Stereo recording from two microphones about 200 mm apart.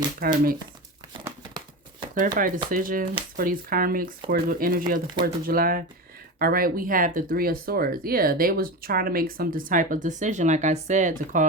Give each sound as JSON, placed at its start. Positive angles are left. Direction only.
{"t": 0.2, "sound": "speech", "side_deg": -45}
{"t": 1.2, "sound": "a sound", "side_deg": -20}
{"t": 2.1, "sound": "speech", "side_deg": -40}